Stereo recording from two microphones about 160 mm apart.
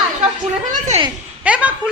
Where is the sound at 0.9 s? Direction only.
45° right (ahead or behind).